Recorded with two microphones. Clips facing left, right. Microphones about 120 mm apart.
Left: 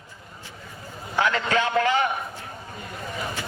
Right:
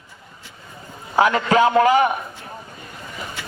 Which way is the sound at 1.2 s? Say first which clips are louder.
Right 7 dB; 25° right (ahead or behind).